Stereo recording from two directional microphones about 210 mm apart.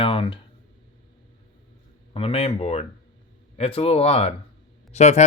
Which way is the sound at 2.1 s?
30° left (ahead or behind).